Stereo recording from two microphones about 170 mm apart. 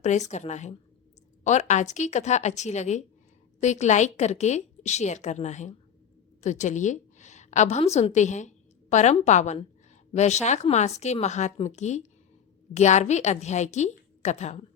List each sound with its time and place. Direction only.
0.0 s a woman's voice: 40° left (ahead or behind)